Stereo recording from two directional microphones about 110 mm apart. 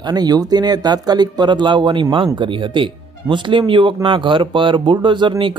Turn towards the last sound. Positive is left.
turn(degrees=-45)  # may be behind; listen again after turning